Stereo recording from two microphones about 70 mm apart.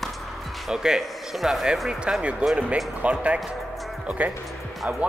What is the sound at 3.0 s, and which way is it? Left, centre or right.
Speech, centre.